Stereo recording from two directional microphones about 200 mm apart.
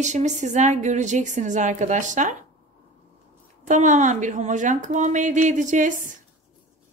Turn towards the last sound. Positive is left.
turn(degrees=-40)  # may be behind; listen again after turning